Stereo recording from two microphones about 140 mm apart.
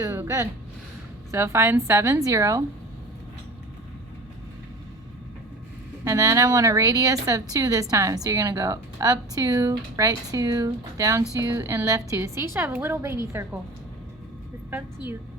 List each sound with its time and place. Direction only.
0.0 s a sound: 20° right (ahead or behind)
1.3 s a woman's voice: 20° right (ahead or behind)
6.1 s a woman's voice: 20° right (ahead or behind)
14.7 s a woman's voice: 15° right (ahead or behind)